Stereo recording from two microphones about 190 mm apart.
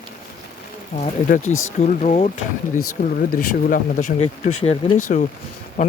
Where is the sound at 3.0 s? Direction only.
50° left (ahead or behind).